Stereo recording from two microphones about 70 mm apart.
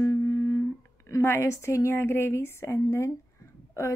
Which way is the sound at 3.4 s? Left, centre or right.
Left.